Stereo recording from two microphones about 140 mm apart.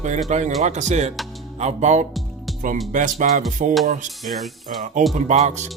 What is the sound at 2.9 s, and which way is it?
Speech, 65° right (ahead or behind).